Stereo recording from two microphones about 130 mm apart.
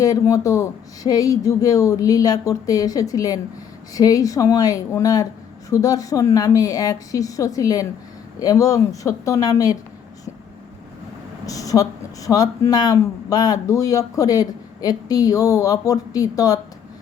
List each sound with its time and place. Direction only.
0.0 s speech: 25° left (ahead or behind)
11.4 s speech: 25° left (ahead or behind)